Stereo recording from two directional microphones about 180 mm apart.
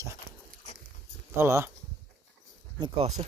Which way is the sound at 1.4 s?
15° right (ahead or behind).